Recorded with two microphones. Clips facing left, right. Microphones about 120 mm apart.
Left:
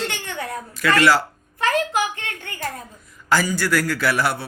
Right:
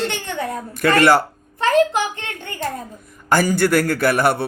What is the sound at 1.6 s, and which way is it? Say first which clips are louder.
A child's voice: right 5 dB; 30° right (ahead or behind).